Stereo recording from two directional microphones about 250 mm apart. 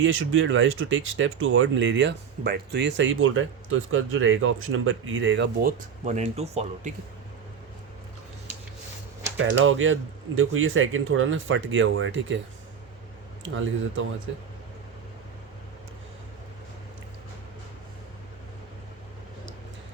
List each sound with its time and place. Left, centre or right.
0.0 s speech: right
6.1 s speech: right
9.4 s speech: right
13.4 s speech: right